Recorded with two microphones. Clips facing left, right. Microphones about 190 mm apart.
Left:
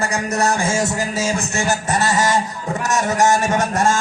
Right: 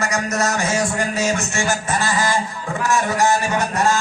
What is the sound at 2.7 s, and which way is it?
Speech, 40° left (ahead or behind).